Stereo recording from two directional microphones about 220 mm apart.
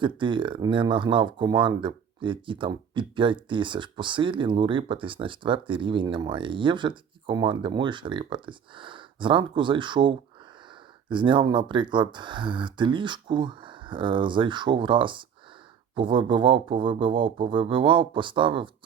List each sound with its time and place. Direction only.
0.2 s speech: 20° right (ahead or behind)